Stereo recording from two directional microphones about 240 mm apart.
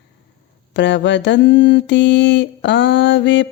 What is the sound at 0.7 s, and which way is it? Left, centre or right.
Mantra, left.